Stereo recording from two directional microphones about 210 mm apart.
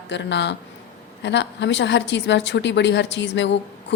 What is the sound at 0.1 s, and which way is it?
Speech, 55° left (ahead or behind).